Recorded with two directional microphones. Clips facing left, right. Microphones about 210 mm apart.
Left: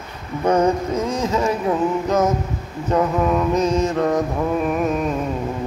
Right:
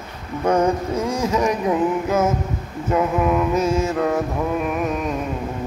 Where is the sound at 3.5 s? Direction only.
5° right (ahead or behind).